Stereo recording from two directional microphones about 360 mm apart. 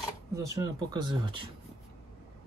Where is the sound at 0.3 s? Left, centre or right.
Centre.